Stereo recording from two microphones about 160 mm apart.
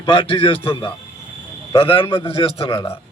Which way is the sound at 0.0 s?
35° left (ahead or behind).